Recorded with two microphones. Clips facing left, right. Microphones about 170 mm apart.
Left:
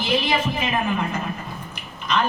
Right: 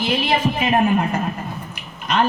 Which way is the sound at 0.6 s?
50° right (ahead or behind).